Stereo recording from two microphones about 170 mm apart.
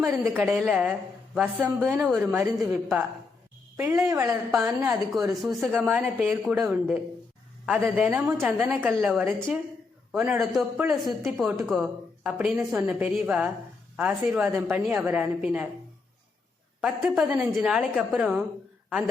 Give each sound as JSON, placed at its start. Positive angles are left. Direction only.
{"t": 0.0, "sound": "a woman's voice", "side_deg": -10}
{"t": 4.0, "sound": "a woman's voice", "side_deg": -15}
{"t": 5.1, "sound": "a woman's voice", "side_deg": 0}
{"t": 16.8, "sound": "a woman's voice", "side_deg": -5}